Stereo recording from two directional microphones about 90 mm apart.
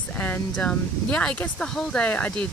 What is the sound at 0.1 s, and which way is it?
Speech, 20° left (ahead or behind).